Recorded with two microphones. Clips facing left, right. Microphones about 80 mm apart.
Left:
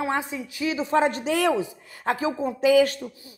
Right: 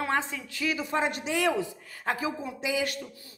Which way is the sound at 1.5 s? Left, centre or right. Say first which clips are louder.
Left 4 dB; centre.